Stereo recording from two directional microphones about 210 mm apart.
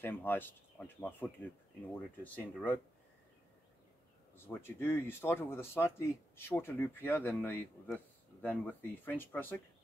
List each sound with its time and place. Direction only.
0.0 s speech: 10° left (ahead or behind)
4.5 s speech: 10° left (ahead or behind)